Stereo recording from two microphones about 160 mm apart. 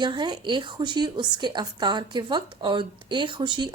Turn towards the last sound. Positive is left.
turn(degrees=-30)  # may be behind; listen again after turning